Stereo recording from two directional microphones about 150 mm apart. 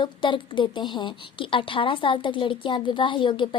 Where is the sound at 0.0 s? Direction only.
35° left (ahead or behind).